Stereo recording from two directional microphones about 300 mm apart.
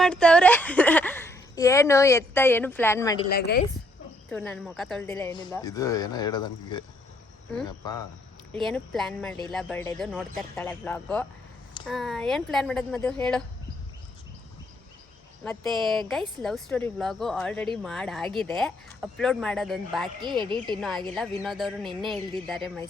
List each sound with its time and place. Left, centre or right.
0.0 s a woman's voice: centre
3.2 s speech: left
4.3 s a woman's voice: centre
8.5 s a woman's voice: centre
15.4 s a woman's voice: centre
20.4 s speech: centre
21.2 s a woman's voice: centre